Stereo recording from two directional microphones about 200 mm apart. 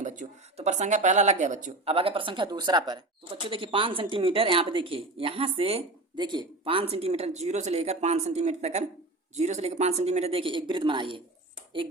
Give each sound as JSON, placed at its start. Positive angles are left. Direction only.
{"t": 0.0, "sound": "speech", "side_deg": -35}